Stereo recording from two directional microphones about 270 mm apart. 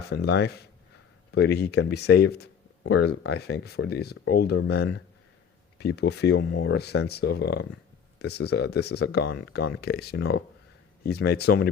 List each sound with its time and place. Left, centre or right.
0.1 s speech: left